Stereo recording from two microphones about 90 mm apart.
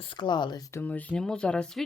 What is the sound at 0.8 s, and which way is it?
Speech, 15° left (ahead or behind).